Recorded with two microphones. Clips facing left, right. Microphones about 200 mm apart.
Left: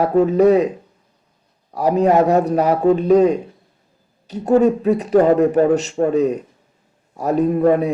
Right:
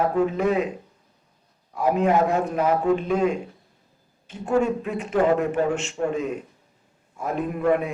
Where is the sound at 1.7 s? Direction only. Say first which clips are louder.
Left 6 dB; 40° left (ahead or behind).